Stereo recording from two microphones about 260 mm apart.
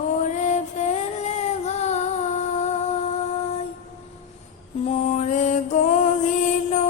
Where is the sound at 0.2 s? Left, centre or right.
Left.